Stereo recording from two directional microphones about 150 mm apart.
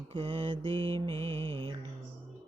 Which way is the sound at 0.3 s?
30° right (ahead or behind).